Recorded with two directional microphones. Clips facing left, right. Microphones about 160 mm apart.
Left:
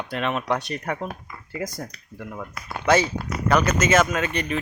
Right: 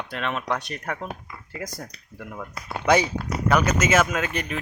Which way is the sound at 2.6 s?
30° right (ahead or behind).